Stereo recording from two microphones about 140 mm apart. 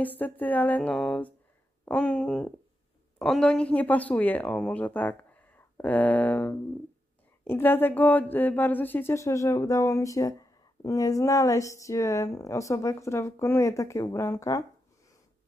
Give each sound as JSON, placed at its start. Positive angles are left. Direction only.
{"t": 0.0, "sound": "speech", "side_deg": 10}